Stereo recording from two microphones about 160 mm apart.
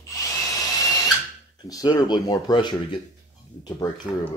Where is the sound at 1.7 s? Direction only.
25° left (ahead or behind).